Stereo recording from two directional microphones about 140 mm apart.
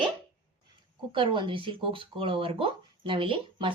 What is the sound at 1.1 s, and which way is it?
Speech, 35° right (ahead or behind).